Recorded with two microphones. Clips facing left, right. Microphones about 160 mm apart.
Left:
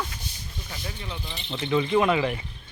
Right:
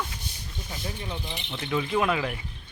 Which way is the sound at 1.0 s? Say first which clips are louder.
Right 2 dB; 15° right (ahead or behind).